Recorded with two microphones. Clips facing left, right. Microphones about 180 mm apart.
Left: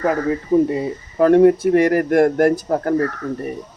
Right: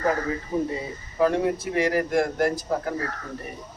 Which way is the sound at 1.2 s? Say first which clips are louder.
Left 11 dB; 55° left (ahead or behind).